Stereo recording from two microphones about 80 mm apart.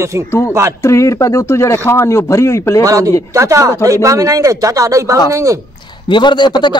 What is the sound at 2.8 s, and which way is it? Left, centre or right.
A man's voice, right.